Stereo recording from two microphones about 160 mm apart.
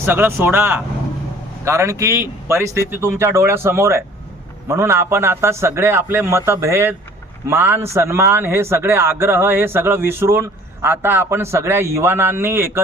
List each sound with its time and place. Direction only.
0.0 s a man's voice: 15° right (ahead or behind)